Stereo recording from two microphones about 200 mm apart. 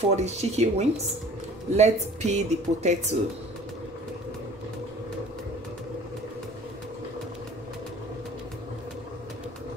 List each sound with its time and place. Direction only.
0.1 s speech: 35° right (ahead or behind)